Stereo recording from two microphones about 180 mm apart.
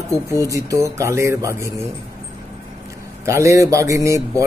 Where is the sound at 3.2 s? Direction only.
15° right (ahead or behind).